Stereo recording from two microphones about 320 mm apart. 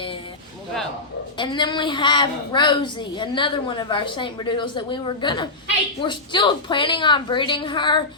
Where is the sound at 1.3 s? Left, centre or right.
Centre.